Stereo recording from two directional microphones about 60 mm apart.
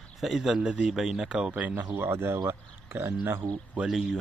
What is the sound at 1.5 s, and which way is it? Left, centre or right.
Speech, right.